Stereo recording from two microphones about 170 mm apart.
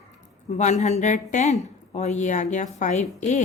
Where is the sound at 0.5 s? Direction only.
40° left (ahead or behind).